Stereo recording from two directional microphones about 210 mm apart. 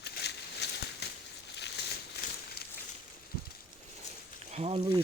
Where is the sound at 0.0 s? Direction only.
55° left (ahead or behind).